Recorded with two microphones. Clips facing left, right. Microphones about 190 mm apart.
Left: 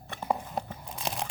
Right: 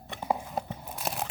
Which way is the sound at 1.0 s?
5° right (ahead or behind).